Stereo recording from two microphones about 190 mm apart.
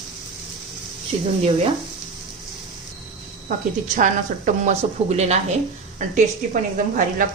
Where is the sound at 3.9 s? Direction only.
45° right (ahead or behind).